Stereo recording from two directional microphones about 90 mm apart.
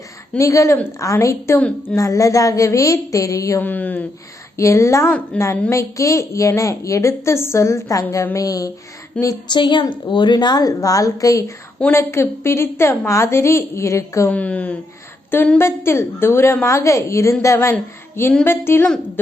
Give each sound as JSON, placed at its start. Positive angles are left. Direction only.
{"t": 0.3, "sound": "a woman's voice", "side_deg": 35}
{"t": 1.5, "sound": "speech", "side_deg": 15}
{"t": 2.0, "sound": "a woman's voice", "side_deg": 35}
{"t": 3.6, "sound": "a woman's voice", "side_deg": 20}
{"t": 4.5, "sound": "a woman's voice", "side_deg": 35}
{"t": 5.3, "sound": "speech", "side_deg": 10}
{"t": 5.7, "sound": "a woman's voice", "side_deg": 35}
{"t": 9.2, "sound": "speech", "side_deg": 15}
{"t": 9.5, "sound": "a woman's voice", "side_deg": 60}
{"t": 14.3, "sound": "speech", "side_deg": 15}
{"t": 15.5, "sound": "a woman's voice", "side_deg": 30}